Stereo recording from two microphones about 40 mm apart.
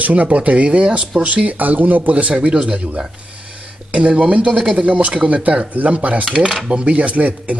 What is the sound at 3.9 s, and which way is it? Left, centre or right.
Speech, right.